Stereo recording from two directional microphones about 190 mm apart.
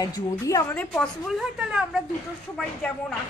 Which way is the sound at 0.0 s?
20° left (ahead or behind).